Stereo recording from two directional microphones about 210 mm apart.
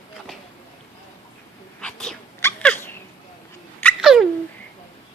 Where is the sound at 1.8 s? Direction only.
5° left (ahead or behind).